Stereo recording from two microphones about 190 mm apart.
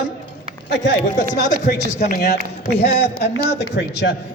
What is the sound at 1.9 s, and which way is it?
Speech, 35° left (ahead or behind).